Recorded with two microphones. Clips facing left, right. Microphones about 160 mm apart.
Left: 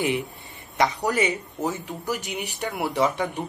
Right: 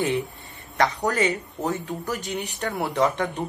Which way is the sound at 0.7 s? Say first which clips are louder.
Even; 15° left (ahead or behind).